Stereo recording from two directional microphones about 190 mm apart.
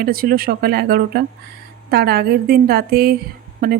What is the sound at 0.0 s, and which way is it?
A woman's voice, 50° right (ahead or behind).